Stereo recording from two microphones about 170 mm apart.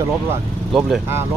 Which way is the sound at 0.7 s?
Centre (ahead or behind).